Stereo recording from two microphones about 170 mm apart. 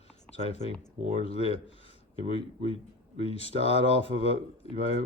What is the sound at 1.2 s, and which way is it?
Speech, 35° left (ahead or behind).